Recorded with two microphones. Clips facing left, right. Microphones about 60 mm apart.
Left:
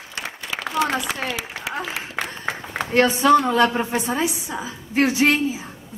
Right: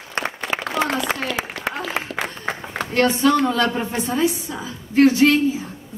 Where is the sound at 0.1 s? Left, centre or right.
Right.